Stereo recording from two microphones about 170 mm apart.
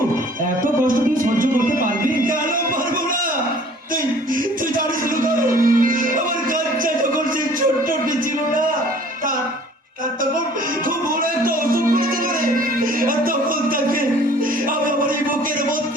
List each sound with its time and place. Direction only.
0.9 s music: 55° right (ahead or behind)
5.2 s music: 55° right (ahead or behind)
11.4 s music: 55° right (ahead or behind)